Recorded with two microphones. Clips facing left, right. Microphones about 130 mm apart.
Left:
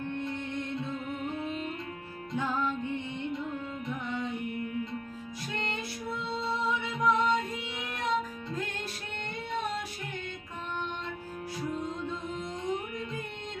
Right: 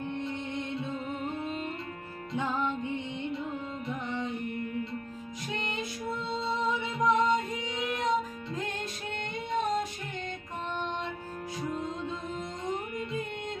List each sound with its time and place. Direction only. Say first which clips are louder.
2.3 s music: even; 20° right (ahead or behind)
5.5 s music: even; 15° right (ahead or behind)